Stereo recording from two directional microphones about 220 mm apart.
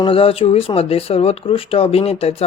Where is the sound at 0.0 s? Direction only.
25° left (ahead or behind).